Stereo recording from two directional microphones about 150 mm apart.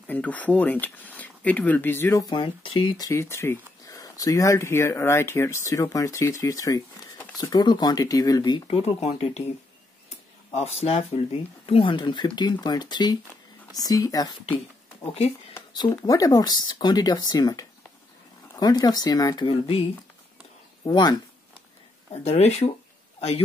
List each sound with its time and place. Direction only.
0.0 s speech: 10° left (ahead or behind)
2.3 s speech: 35° left (ahead or behind)
3.1 s speech: 15° left (ahead or behind); by 9.4 s 45° left (ahead or behind)
10.6 s speech: 40° left (ahead or behind); by 14.3 s 25° left (ahead or behind)
15.0 s speech: 40° left (ahead or behind)
15.7 s speech: 30° left (ahead or behind)
20.8 s speech: 30° left (ahead or behind)
22.1 s speech: 45° left (ahead or behind)